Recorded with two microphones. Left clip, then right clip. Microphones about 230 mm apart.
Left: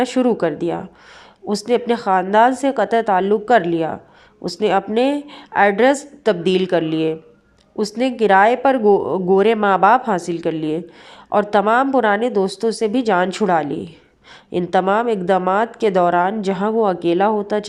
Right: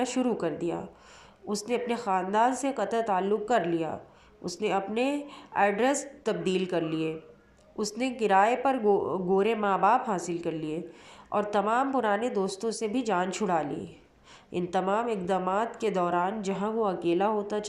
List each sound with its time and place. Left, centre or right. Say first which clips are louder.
0.0 s speech: left 11 dB; left